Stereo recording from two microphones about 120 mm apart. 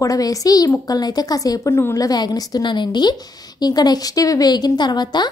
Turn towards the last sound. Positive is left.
turn(degrees=35)  # may be behind; listen again after turning